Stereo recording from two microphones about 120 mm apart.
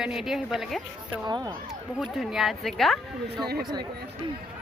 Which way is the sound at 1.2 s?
35° right (ahead or behind).